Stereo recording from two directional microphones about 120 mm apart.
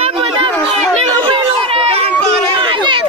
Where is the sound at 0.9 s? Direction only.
55° right (ahead or behind).